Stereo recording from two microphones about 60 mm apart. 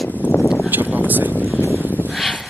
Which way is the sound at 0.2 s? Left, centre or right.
Left.